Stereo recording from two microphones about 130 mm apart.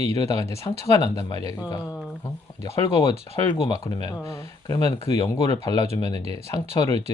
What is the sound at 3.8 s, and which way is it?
Speech, 30° left (ahead or behind).